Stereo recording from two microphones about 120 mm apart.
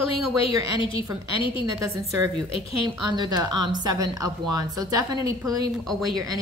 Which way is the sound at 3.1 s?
35° right (ahead or behind).